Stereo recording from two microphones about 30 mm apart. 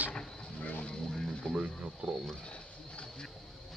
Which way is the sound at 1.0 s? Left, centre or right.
Centre.